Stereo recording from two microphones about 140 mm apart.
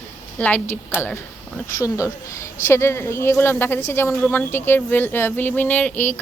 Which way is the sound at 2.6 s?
20° left (ahead or behind).